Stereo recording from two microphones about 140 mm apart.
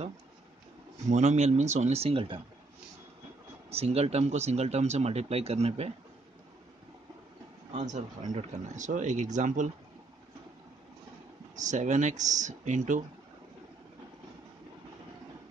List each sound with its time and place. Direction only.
1.1 s speech: 55° right (ahead or behind); by 2.4 s 40° right (ahead or behind)
3.7 s speech: 50° right (ahead or behind)
7.7 s speech: 60° right (ahead or behind)
11.5 s speech: 60° right (ahead or behind)